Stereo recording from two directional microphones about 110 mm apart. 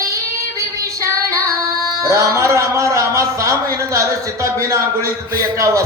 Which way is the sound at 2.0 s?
30° right (ahead or behind).